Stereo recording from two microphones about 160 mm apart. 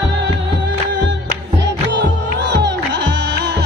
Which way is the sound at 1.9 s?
90° right.